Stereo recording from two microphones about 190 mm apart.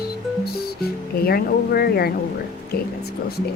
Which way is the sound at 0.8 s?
55° left (ahead or behind).